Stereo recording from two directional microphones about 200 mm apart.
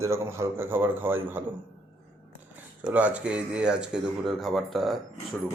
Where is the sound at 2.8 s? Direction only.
5° right (ahead or behind).